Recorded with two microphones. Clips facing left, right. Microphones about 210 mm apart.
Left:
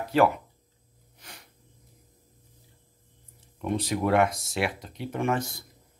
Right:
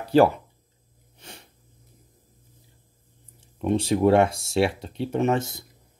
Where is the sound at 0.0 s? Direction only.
30° right (ahead or behind).